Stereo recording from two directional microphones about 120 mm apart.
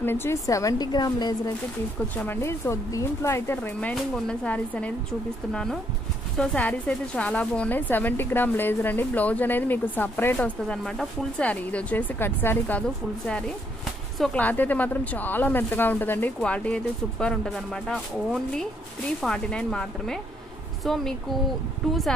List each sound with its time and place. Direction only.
0.0 s speech: 20° left (ahead or behind); by 1.3 s 35° left (ahead or behind)
2.1 s speech: 15° left (ahead or behind)
3.9 s speech: 5° left (ahead or behind)
14.3 s speech: 15° left (ahead or behind)